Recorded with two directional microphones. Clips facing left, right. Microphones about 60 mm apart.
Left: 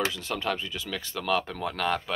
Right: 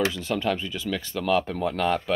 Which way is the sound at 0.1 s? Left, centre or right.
Centre.